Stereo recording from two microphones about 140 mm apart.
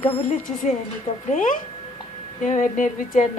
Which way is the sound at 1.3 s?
65° left (ahead or behind).